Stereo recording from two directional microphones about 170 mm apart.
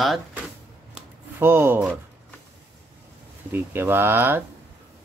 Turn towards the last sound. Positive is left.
turn(degrees=-15)  # may be behind; listen again after turning